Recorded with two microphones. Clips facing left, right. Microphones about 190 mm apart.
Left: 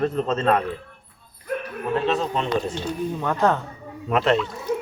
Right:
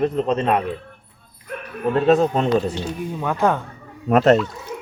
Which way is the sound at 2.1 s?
45° right (ahead or behind).